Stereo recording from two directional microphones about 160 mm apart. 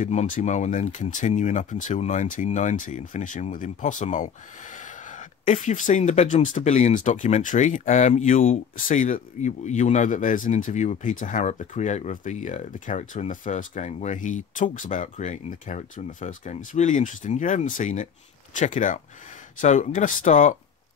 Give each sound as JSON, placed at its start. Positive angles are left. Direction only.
{"t": 0.0, "sound": "speech", "side_deg": 50}
{"t": 5.4, "sound": "speech", "side_deg": 50}